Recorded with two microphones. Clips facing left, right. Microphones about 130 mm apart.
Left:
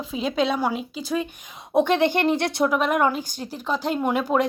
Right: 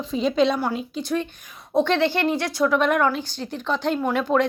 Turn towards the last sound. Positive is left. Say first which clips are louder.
# right 1 dB
turn(degrees=10)  # may be behind; listen again after turning